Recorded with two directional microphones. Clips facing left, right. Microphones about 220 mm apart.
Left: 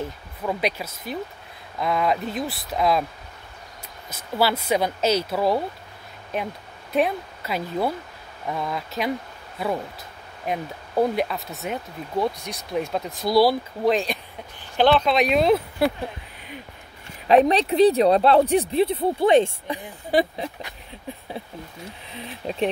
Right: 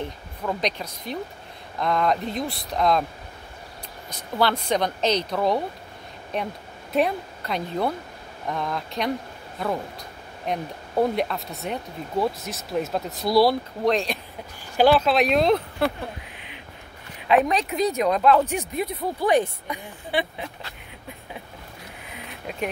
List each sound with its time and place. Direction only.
0.0 s speech: 5° left (ahead or behind)
4.1 s speech: 5° left (ahead or behind)
17.3 s speech: 35° left (ahead or behind)
20.1 s speech: 40° left (ahead or behind)
22.1 s a sound: 30° left (ahead or behind)